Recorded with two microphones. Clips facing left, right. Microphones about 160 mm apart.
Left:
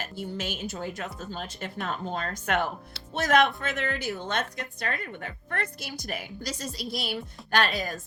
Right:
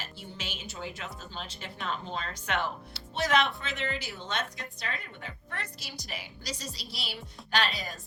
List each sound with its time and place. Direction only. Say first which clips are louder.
0.0 s a woman's voice: left 8 dB; 50° left (ahead or behind)